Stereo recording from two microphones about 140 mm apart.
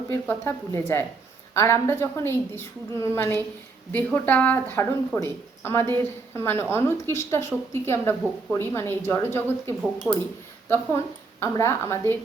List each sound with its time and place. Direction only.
0.1 s a woman's voice: 20° left (ahead or behind)
10.1 s speech: 5° right (ahead or behind)
10.7 s a woman's voice: 20° left (ahead or behind)